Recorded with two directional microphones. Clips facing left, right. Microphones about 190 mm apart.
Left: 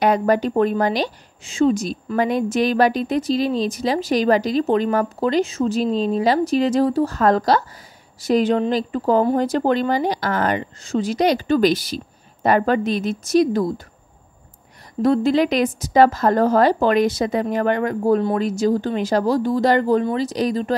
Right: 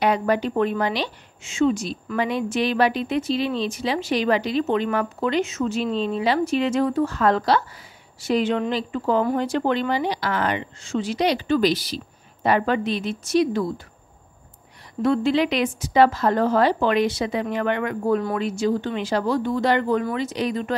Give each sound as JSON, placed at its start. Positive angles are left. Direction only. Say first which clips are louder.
{"t": 0.0, "sound": "a woman's voice", "louder": "left 3 dB", "side_deg": 45}
{"t": 15.0, "sound": "a woman's voice", "louder": "left 3 dB", "side_deg": 40}